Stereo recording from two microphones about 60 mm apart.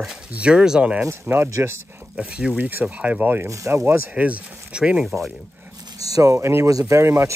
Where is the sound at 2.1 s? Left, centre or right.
Centre.